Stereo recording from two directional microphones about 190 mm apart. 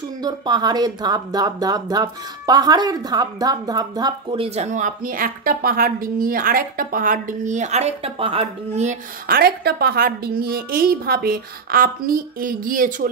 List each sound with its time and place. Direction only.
0.2 s speech: 20° right (ahead or behind)
4.6 s a woman's voice: 40° right (ahead or behind)
9.3 s a woman's voice: 55° right (ahead or behind)